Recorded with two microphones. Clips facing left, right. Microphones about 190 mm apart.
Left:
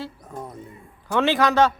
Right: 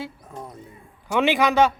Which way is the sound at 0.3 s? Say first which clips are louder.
Left 2 dB; 5° left (ahead or behind).